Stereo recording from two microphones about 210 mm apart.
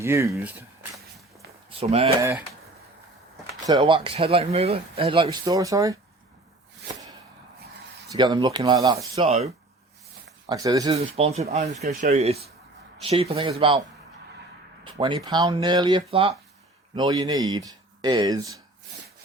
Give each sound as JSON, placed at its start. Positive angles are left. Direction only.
{"t": 0.0, "sound": "speech", "side_deg": -15}
{"t": 1.8, "sound": "speech", "side_deg": -30}
{"t": 3.7, "sound": "speech", "side_deg": -25}
{"t": 8.0, "sound": "speech", "side_deg": -20}
{"t": 9.1, "sound": "speech", "side_deg": -30}
{"t": 10.5, "sound": "speech", "side_deg": -15}
{"t": 10.9, "sound": "speech", "side_deg": -30}
{"t": 14.9, "sound": "speech", "side_deg": -20}